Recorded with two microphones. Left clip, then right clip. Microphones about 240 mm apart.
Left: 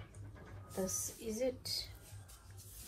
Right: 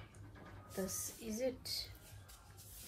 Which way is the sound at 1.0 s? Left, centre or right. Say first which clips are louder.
Left 2 dB; centre.